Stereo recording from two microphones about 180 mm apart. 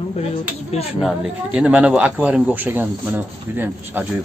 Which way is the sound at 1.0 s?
5° right (ahead or behind).